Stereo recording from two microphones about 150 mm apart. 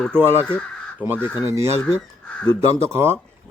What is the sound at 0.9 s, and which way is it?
Speech, 10° right (ahead or behind).